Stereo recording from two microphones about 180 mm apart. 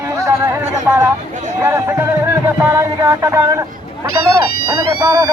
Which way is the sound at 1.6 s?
15° right (ahead or behind).